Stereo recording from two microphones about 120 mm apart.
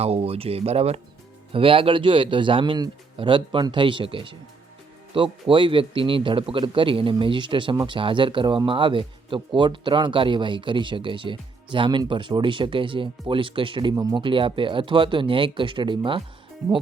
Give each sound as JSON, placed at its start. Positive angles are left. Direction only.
{"t": 0.0, "sound": "speech", "side_deg": -55}